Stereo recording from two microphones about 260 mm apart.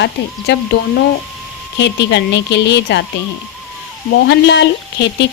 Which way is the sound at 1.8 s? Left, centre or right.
Left.